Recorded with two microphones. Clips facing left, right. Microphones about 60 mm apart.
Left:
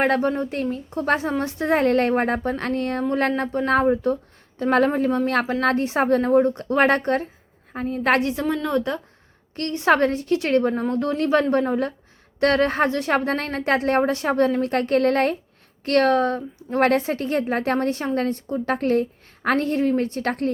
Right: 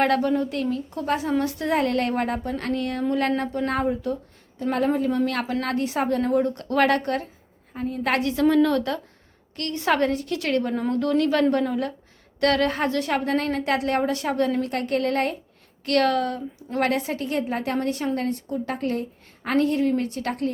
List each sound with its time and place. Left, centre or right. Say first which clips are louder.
0.0 s a woman's voice: even; left
4.6 s a woman's voice: left 4 dB; left
7.7 s a woman's voice: left 4 dB; left
8.4 s a woman's voice: right 3 dB; centre
9.6 s a woman's voice: left 4 dB; left
15.8 s a woman's voice: left 3 dB; left